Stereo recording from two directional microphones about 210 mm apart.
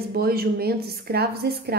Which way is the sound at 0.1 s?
45° right (ahead or behind).